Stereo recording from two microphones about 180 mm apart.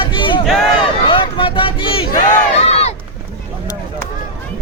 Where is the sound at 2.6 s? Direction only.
35° left (ahead or behind).